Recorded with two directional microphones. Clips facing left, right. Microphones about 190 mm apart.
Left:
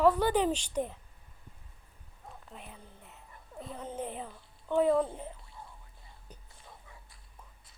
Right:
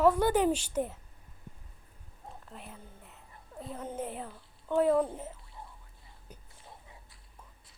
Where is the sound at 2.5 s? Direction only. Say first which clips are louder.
Right 1 dB; centre (ahead or behind).